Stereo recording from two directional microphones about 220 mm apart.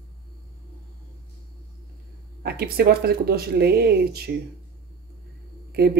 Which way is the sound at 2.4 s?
45° right (ahead or behind).